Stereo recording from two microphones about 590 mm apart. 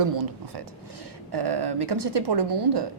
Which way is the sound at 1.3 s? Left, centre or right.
Right.